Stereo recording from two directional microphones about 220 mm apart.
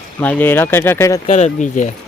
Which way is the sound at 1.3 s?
35° left (ahead or behind).